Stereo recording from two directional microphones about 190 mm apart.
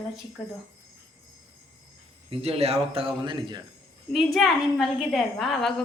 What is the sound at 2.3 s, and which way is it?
A man's voice, 30° right (ahead or behind).